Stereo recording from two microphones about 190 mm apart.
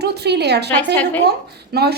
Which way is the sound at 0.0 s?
60° right (ahead or behind).